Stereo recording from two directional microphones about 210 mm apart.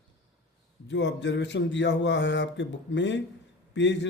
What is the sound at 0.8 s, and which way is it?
Mantra, 55° left (ahead or behind).